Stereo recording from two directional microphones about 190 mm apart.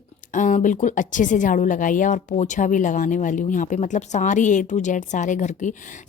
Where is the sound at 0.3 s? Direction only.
40° left (ahead or behind).